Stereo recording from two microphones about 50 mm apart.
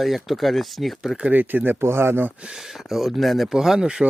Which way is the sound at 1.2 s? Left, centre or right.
Right.